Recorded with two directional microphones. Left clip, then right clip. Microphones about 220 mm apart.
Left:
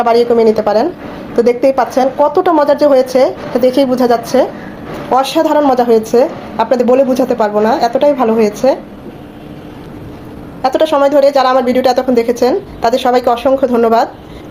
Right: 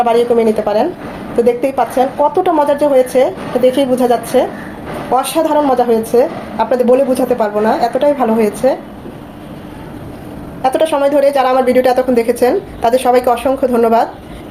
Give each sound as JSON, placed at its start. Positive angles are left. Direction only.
{"t": 0.0, "sound": "a woman's voice", "side_deg": 25}
{"t": 10.6, "sound": "a woman's voice", "side_deg": 20}